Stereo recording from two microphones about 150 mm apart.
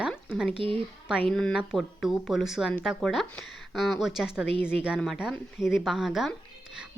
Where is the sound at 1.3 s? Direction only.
5° left (ahead or behind).